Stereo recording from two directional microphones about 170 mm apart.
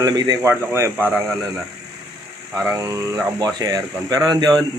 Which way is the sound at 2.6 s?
20° right (ahead or behind).